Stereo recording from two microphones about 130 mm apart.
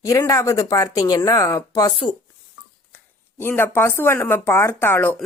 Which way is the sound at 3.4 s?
15° left (ahead or behind).